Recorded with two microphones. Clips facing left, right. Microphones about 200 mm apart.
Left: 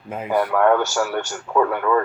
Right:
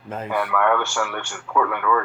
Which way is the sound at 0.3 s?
40° left (ahead or behind).